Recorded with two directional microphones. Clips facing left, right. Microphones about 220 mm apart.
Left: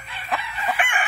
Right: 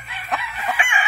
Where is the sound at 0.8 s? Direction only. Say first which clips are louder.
Left 1 dB; 55° left (ahead or behind).